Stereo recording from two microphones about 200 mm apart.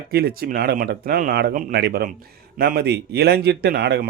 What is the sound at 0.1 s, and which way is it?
A man's voice, 50° right (ahead or behind).